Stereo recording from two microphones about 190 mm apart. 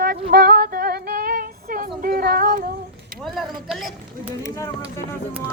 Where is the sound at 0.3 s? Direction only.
50° right (ahead or behind).